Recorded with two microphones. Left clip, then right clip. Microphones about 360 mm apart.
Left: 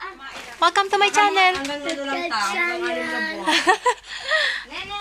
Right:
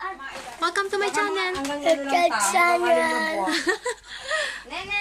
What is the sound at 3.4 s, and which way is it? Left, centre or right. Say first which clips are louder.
A woman's voice: left 6 dB; centre.